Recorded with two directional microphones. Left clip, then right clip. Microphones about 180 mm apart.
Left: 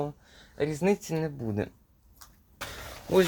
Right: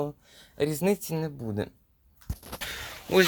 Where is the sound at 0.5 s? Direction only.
40° right (ahead or behind).